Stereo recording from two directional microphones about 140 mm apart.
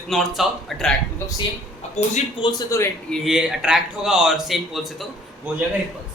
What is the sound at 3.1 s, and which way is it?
Speech, 5° right (ahead or behind).